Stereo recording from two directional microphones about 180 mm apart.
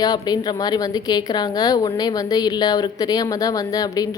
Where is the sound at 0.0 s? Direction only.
20° left (ahead or behind).